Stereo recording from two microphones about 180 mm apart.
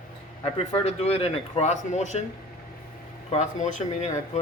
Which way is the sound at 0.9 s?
35° left (ahead or behind).